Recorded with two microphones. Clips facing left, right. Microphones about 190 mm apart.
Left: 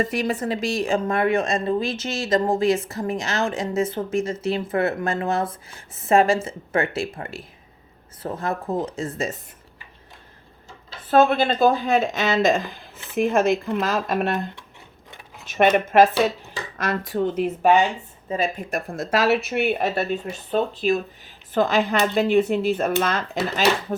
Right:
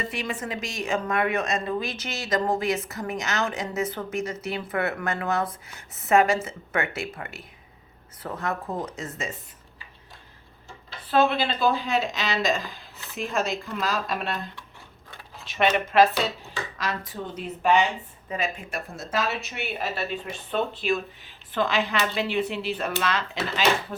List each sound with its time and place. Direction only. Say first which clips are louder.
0.0 s a woman's voice: left 8 dB; 40° left (ahead or behind)
11.1 s speech: left 5 dB; 45° left (ahead or behind)
17.6 s speech: left 3 dB; 45° left (ahead or behind)
18.3 s a woman's voice: left 5 dB; 30° left (ahead or behind)
18.7 s speech: left 7 dB; 55° left (ahead or behind)
20.2 s speech: left 4 dB; 40° left (ahead or behind)